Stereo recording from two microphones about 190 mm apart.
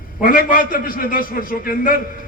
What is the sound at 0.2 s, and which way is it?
A man's voice, 45° left (ahead or behind).